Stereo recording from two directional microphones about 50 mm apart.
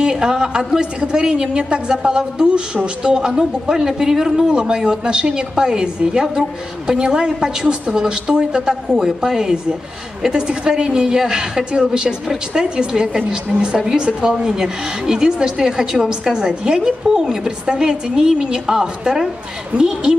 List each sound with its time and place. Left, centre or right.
0.0 s a woman's voice: centre